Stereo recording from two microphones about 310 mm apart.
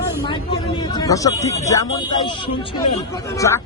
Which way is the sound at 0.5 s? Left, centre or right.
Centre.